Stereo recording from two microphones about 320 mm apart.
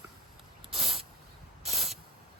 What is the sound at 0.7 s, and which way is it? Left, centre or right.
Spray, centre.